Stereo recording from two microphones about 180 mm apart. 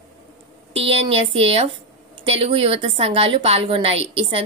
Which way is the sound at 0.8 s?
30° right (ahead or behind).